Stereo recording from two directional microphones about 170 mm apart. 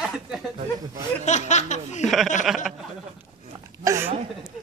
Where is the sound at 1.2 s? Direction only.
45° left (ahead or behind).